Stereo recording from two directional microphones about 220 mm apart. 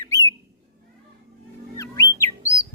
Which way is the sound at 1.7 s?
15° left (ahead or behind).